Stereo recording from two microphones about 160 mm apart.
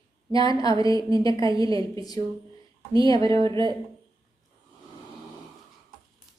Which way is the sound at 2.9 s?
30° right (ahead or behind).